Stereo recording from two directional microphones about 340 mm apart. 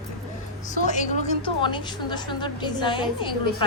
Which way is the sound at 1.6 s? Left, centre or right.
Centre.